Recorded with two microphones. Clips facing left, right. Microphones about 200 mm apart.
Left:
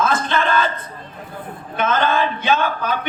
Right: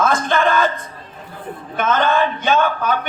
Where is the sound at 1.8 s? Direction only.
50° right (ahead or behind).